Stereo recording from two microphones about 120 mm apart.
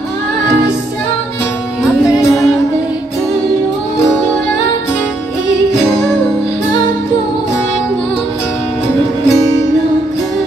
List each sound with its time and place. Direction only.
2.0 s music: 25° left (ahead or behind)